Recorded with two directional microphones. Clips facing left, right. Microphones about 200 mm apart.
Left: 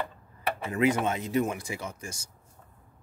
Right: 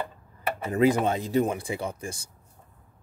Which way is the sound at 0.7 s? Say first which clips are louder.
Right 4 dB; 35° right (ahead or behind).